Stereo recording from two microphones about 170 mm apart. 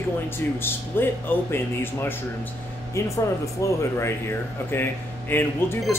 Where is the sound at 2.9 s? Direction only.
20° left (ahead or behind).